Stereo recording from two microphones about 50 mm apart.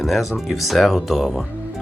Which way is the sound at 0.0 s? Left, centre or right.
Centre.